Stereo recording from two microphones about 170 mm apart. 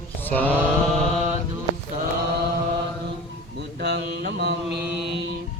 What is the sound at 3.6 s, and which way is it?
Mantra, 85° right.